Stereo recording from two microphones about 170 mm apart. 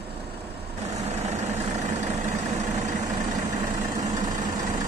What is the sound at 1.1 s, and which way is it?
Vehicle, 40° right (ahead or behind).